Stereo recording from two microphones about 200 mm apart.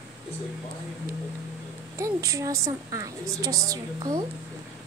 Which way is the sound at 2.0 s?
15° right (ahead or behind).